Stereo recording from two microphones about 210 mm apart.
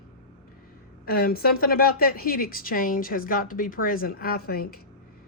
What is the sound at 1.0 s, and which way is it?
A woman's voice, 45° left (ahead or behind).